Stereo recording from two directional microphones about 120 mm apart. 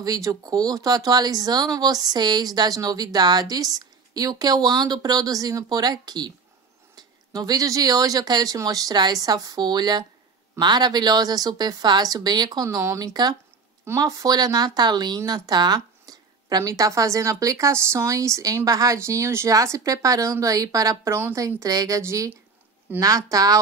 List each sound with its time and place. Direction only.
0.0 s speech: 30° right (ahead or behind)